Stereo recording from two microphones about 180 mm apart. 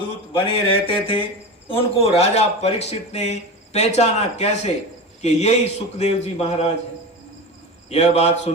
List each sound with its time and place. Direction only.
0.0 s speech: 30° left (ahead or behind)
7.9 s speech: 35° left (ahead or behind)